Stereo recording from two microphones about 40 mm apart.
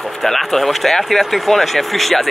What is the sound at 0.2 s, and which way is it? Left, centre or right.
Speech, centre.